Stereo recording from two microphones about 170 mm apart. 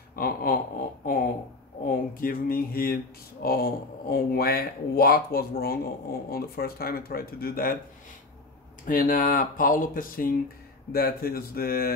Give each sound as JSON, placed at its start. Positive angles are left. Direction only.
{"t": 0.1, "sound": "a sound", "side_deg": 60}
{"t": 1.9, "sound": "speech", "side_deg": 55}
{"t": 8.8, "sound": "speech", "side_deg": 50}